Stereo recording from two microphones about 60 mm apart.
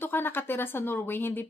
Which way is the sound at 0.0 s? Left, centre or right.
Left.